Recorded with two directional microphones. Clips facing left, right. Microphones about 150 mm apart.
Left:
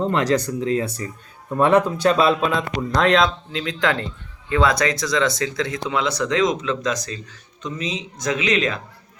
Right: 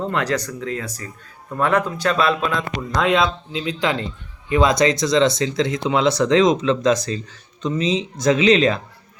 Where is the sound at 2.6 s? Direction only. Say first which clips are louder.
Left 2 dB; 5° right (ahead or behind).